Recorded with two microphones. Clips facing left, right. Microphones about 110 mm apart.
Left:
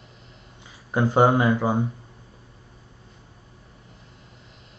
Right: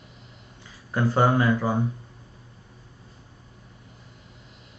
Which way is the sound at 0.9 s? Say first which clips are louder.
Left 3 dB; 15° left (ahead or behind).